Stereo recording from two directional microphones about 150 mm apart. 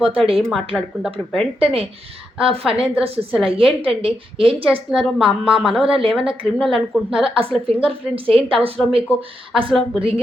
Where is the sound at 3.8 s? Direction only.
35° right (ahead or behind).